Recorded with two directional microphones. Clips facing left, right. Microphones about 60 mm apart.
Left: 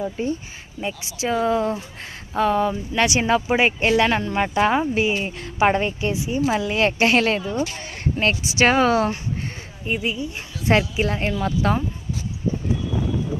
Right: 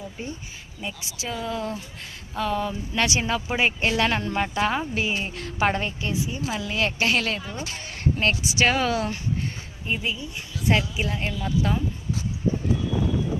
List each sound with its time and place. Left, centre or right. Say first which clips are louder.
0.0 s speech: left 10 dB; left
0.8 s speech: left 7 dB; left
8.2 s speech: left 4 dB; left
9.8 s speech: left 4 dB; centre
10.3 s speech: left 4 dB; left
11.4 s speech: left 3 dB; left